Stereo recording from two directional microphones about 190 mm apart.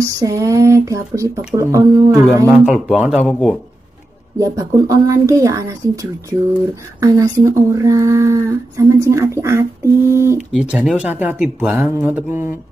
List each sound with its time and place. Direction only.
0.0 s speech: 15° right (ahead or behind)
2.6 s speech: 5° right (ahead or behind)
4.4 s speech: 15° right (ahead or behind)
7.0 s speech: 20° right (ahead or behind)